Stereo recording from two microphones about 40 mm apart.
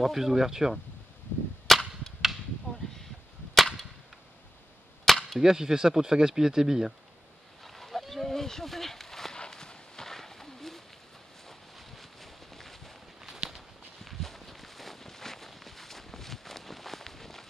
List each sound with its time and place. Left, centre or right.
0.0 s speech: centre
1.7 s cap gun: centre
3.5 s cap gun: centre
5.0 s cap gun: centre
5.4 s speech: centre
7.6 s a sound: centre
9.4 s horse: centre
11.7 s boat: centre
13.2 s walk: centre
14.0 s a sound: centre